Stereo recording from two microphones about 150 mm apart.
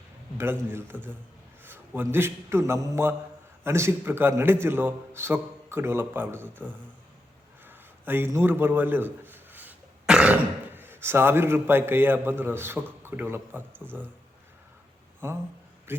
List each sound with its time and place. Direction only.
0.3 s a man's voice: 15° right (ahead or behind)
15.2 s a man's voice: 15° right (ahead or behind)
15.9 s a sound: 15° right (ahead or behind)